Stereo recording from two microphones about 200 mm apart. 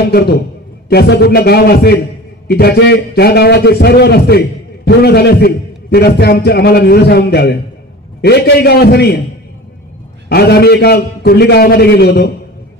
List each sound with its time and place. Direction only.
0.0 s a man's voice: 50° left (ahead or behind)
10.3 s a man's voice: 55° left (ahead or behind)